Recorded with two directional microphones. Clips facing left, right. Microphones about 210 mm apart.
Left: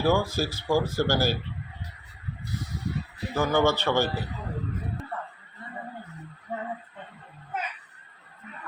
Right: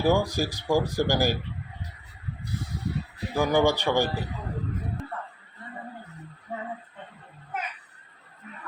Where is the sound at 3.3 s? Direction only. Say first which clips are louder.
Right 1 dB; 15° right (ahead or behind).